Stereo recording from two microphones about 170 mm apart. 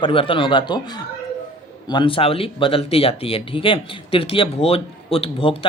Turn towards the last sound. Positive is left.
turn(degrees=30)  # may be behind; listen again after turning